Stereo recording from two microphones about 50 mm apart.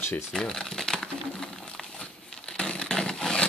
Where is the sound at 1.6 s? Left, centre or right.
Centre.